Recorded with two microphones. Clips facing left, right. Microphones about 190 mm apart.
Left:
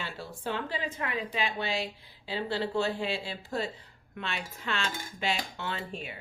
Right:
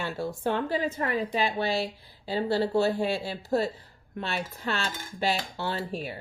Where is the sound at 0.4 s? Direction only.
45° right (ahead or behind).